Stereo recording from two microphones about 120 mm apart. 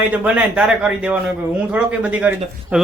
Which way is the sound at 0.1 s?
10° right (ahead or behind).